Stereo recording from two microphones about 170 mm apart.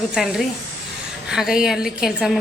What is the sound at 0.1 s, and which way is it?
A woman's voice, centre (ahead or behind).